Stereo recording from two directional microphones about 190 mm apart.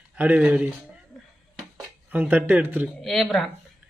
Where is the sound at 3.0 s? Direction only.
Centre (ahead or behind).